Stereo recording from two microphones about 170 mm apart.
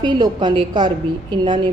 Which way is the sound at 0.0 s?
25° right (ahead or behind).